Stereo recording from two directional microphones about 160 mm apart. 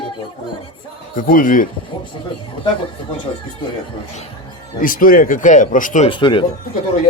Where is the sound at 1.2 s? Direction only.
60° left (ahead or behind).